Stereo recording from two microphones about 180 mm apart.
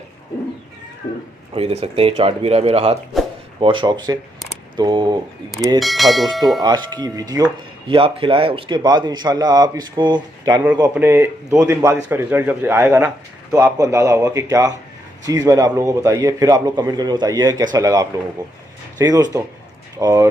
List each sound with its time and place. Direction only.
1.5 s a man's voice: 35° right (ahead or behind)
5.8 s speech: centre (ahead or behind)
6.6 s a man's voice: 20° right (ahead or behind)